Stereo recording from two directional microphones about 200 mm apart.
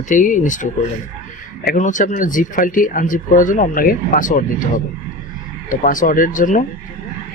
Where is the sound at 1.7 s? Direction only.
40° left (ahead or behind).